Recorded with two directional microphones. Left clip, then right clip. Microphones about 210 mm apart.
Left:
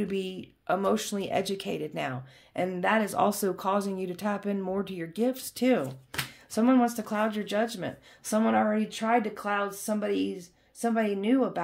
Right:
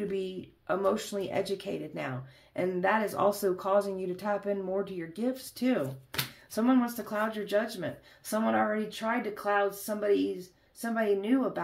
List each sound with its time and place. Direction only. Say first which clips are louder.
0.1 s speech: left 1 dB; 45° left (ahead or behind)